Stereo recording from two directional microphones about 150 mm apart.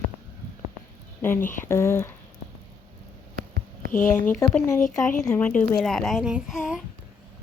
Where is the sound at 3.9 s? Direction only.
60° left (ahead or behind).